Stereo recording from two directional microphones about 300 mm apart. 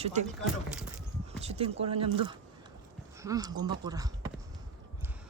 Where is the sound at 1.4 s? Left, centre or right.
Centre.